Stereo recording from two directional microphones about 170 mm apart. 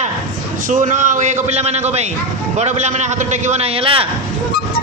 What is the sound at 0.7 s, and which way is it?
A man's voice, 50° right (ahead or behind).